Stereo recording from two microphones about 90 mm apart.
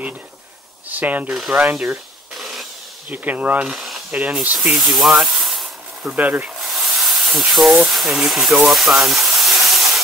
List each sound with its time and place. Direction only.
0.8 s speech: 20° right (ahead or behind)
1.3 s speech: 5° right (ahead or behind)
1.6 s speech: 15° right (ahead or behind)
2.3 s a sound: centre (ahead or behind)
3.1 s speech: 15° right (ahead or behind)
3.7 s spray: centre (ahead or behind)
4.1 s speech: 15° right (ahead or behind)
4.6 s steam: centre (ahead or behind)
6.1 s speech: 15° right (ahead or behind)
6.7 s hiss: 5° right (ahead or behind)
7.5 s speech: centre (ahead or behind)